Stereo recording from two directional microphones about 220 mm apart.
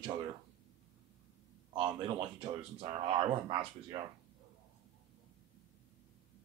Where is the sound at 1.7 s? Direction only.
20° right (ahead or behind).